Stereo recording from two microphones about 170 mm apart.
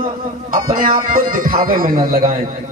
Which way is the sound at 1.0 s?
55° right (ahead or behind).